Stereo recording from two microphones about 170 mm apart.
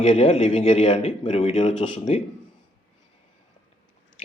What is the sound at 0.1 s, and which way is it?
Speech, 35° left (ahead or behind).